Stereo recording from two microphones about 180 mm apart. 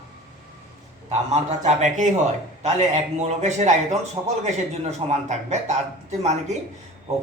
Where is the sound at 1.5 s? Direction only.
40° right (ahead or behind).